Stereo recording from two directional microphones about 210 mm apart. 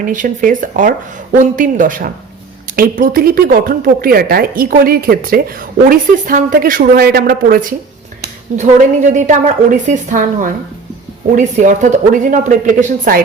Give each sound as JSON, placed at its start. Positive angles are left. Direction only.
{"t": 0.0, "sound": "speech", "side_deg": -40}